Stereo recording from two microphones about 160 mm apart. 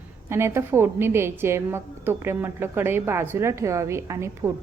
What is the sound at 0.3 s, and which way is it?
A woman's voice, 15° right (ahead or behind).